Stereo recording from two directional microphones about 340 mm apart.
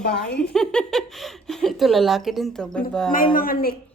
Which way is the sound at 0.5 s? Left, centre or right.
Centre.